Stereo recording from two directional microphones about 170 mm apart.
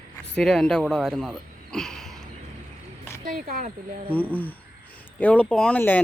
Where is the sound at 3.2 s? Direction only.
55° right (ahead or behind).